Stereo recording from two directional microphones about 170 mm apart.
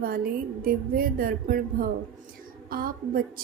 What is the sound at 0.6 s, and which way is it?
A woman's voice, 55° right (ahead or behind).